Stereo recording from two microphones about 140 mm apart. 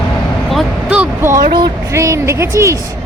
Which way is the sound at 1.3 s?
90° right.